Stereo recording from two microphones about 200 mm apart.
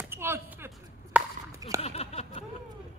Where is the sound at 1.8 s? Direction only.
30° left (ahead or behind).